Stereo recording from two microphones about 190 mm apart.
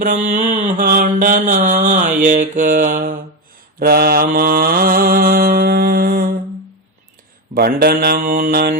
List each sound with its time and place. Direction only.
0.0 s mantra: 45° right (ahead or behind)
7.5 s mantra: 55° right (ahead or behind)